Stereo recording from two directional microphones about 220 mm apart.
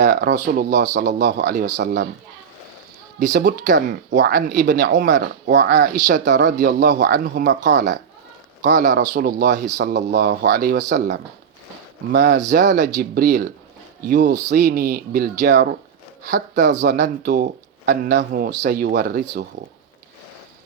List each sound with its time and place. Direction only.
0.0 s speech: 45° right (ahead or behind)
1.8 s speech: 50° right (ahead or behind)
3.2 s speech: 40° right (ahead or behind)
16.8 s speech: 40° right (ahead or behind)